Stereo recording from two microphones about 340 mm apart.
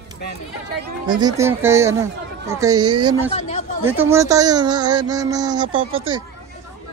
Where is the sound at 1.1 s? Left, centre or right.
Centre.